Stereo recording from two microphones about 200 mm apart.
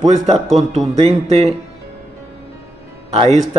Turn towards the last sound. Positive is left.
turn(degrees=-35)  # may be behind; listen again after turning